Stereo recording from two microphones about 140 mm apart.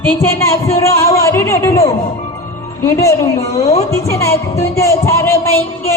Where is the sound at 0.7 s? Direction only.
20° left (ahead or behind).